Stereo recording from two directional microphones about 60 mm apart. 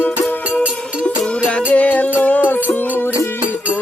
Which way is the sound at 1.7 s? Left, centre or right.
Left.